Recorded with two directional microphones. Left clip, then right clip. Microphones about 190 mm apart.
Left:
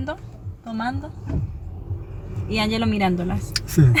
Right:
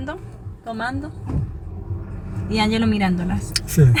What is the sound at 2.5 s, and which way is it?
Speech, 30° left (ahead or behind).